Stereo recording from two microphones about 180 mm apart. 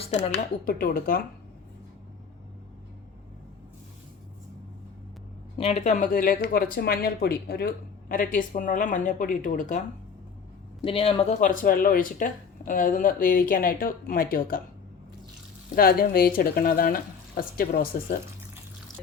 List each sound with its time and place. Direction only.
0.0 s speech: 40° left (ahead or behind)
0.3 s speech: 55° left (ahead or behind)
5.5 s speech: 35° left (ahead or behind)
10.8 s speech: 35° left (ahead or behind); by 14.6 s 55° left (ahead or behind)
15.7 s speech: 55° left (ahead or behind)